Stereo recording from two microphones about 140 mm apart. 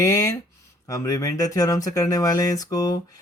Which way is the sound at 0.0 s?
20° left (ahead or behind).